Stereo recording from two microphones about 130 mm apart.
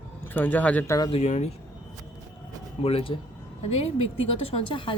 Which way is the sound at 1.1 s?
60° left (ahead or behind).